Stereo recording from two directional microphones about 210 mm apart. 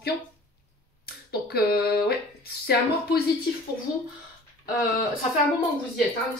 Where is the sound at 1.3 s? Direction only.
50° left (ahead or behind).